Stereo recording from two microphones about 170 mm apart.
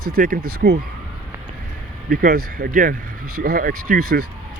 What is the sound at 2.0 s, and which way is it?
Speech, 60° right (ahead or behind).